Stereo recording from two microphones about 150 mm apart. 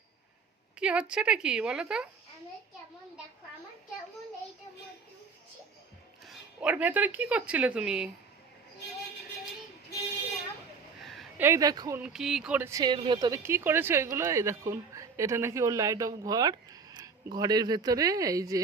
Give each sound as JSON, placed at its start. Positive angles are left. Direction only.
{"t": 0.8, "sound": "a woman's voice", "side_deg": -5}
{"t": 6.2, "sound": "speech", "side_deg": -5}
{"t": 11.0, "sound": "a sound", "side_deg": 0}
{"t": 11.3, "sound": "speech", "side_deg": -20}
{"t": 11.9, "sound": "a woman's voice", "side_deg": -5}
{"t": 12.8, "sound": "speech", "side_deg": -30}